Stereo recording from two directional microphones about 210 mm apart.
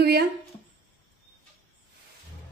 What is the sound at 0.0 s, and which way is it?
Speech, 50° right (ahead or behind).